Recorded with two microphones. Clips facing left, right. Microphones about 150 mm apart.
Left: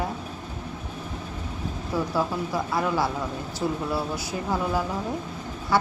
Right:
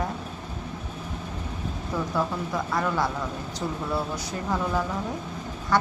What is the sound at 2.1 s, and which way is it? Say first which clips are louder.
A woman's voice: even; 5° left (ahead or behind).